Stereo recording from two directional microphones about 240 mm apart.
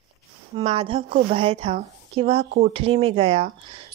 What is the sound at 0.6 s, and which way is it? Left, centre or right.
A woman's voice, right.